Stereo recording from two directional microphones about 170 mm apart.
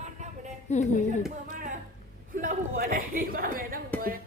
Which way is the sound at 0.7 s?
45° left (ahead or behind).